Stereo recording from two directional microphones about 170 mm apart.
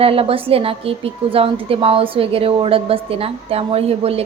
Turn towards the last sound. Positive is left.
turn(degrees=-35)  # may be behind; listen again after turning